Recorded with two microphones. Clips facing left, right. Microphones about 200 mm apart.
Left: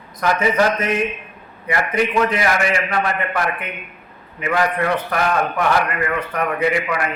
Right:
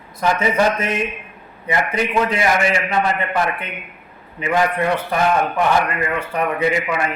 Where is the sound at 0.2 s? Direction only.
25° right (ahead or behind).